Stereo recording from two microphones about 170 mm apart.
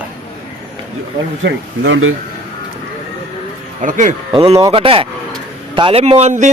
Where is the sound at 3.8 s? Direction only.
50° right (ahead or behind).